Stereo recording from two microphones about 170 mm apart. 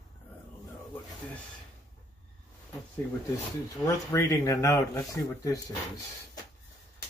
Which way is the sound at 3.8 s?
20° left (ahead or behind).